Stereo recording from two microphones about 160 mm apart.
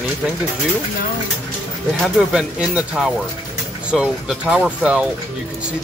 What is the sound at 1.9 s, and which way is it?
Speech, centre (ahead or behind).